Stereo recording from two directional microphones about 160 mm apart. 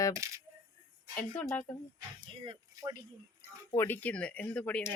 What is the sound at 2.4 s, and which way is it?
Speech, 25° right (ahead or behind).